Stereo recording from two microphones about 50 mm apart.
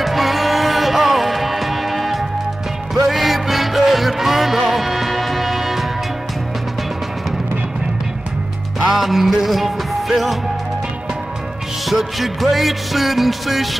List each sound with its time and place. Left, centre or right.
0.0 s music: centre
8.7 s music: centre
11.8 s music: centre